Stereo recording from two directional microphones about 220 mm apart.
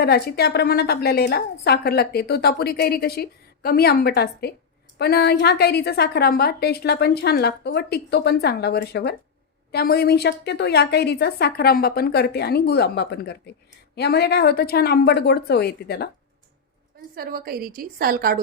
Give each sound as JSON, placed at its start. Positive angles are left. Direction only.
{"t": 0.0, "sound": "a woman's voice", "side_deg": 45}
{"t": 17.2, "sound": "a woman's voice", "side_deg": -45}